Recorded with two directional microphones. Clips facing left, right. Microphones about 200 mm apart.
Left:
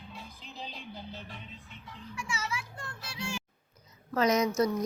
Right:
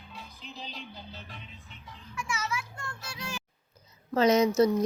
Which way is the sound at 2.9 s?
30° left (ahead or behind).